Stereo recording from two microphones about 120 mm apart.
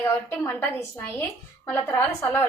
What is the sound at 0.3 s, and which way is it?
A woman's voice, 20° left (ahead or behind).